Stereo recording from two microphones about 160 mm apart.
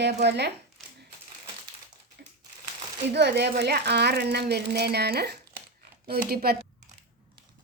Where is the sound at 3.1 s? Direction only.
90° right.